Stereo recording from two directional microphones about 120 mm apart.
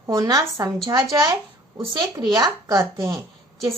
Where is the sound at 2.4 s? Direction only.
25° right (ahead or behind).